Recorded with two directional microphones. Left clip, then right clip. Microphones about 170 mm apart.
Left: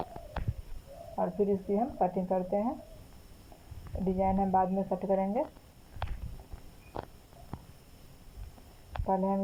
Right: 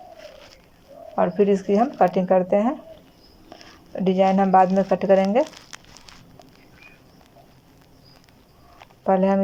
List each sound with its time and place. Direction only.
1.1 s speech: 35° right (ahead or behind)
4.0 s speech: 35° right (ahead or behind)
4.7 s speech: 45° right (ahead or behind)
5.1 s speech: 30° right (ahead or behind)
9.0 s speech: 30° right (ahead or behind)